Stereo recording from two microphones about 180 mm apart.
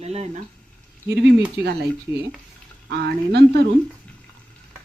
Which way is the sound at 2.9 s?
65° right (ahead or behind).